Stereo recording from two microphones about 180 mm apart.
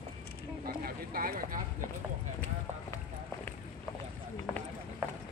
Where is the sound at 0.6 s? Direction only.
55° right (ahead or behind).